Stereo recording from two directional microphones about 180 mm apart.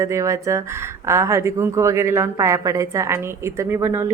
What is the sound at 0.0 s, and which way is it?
A woman's voice, 15° right (ahead or behind).